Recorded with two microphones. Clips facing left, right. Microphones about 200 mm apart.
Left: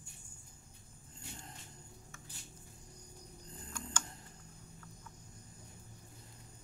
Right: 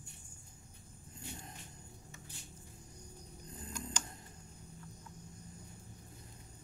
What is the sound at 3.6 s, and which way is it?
Tick-tock, 15° right (ahead or behind).